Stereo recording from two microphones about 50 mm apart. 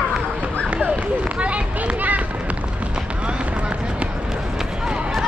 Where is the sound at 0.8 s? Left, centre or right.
Right.